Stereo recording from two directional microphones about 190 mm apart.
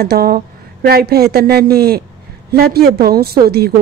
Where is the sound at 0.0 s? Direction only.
55° right (ahead or behind).